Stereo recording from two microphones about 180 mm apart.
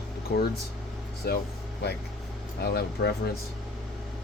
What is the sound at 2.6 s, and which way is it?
Speech, 65° left (ahead or behind).